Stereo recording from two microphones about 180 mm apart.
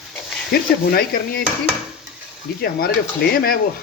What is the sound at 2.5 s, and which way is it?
Speech, 60° left (ahead or behind).